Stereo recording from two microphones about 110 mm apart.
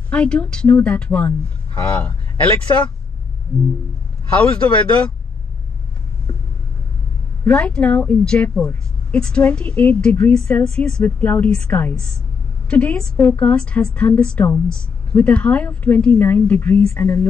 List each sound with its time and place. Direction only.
0.1 s a woman's voice: 10° left (ahead or behind)
7.4 s a woman's voice: 10° left (ahead or behind)